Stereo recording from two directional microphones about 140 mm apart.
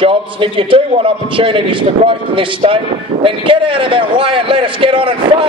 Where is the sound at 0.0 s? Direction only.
40° right (ahead or behind).